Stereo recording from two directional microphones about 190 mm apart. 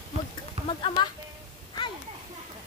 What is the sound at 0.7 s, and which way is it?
Speech, 25° left (ahead or behind).